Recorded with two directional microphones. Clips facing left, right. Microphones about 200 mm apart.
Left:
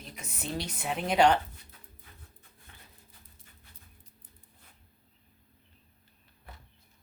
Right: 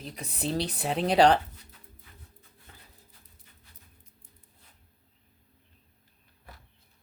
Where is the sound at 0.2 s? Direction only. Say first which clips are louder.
Right 6 dB; 35° right (ahead or behind).